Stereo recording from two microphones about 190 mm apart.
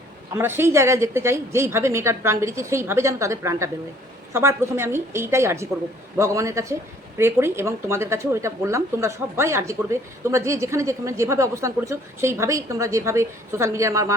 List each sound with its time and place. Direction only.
0.3 s speech: 10° right (ahead or behind)